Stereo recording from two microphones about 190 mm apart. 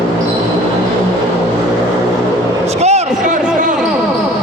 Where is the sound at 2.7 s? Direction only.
35° right (ahead or behind).